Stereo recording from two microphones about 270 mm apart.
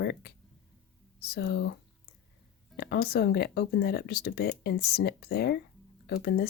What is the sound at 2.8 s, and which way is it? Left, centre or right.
Speech, left.